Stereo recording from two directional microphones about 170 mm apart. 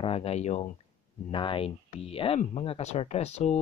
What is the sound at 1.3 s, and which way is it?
Speech, 30° left (ahead or behind).